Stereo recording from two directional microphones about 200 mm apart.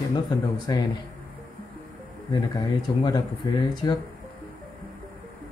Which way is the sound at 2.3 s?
20° left (ahead or behind).